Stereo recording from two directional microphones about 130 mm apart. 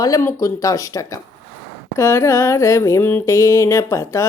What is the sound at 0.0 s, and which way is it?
Speech, 25° left (ahead or behind).